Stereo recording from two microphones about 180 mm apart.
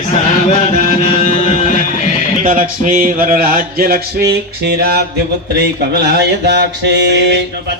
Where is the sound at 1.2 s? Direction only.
40° left (ahead or behind).